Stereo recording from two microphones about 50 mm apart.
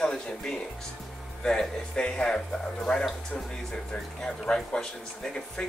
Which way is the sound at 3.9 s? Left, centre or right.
Centre.